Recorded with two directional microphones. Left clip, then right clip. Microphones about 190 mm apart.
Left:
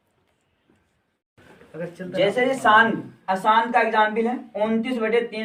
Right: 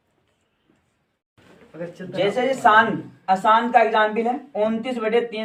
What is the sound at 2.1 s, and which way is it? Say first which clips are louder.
A woman's voice: left 1 dB; 15° right (ahead or behind).